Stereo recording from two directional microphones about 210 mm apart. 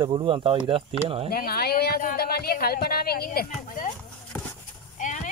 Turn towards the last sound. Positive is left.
turn(degrees=35)  # may be behind; listen again after turning